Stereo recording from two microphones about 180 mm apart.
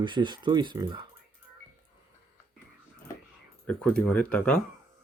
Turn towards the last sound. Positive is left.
turn(degrees=5)  # may be behind; listen again after turning